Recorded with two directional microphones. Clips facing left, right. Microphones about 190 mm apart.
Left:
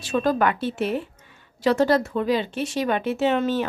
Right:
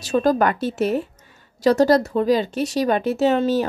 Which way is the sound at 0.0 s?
40° right (ahead or behind).